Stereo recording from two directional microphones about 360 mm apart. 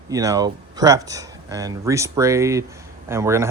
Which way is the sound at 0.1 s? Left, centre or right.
Centre.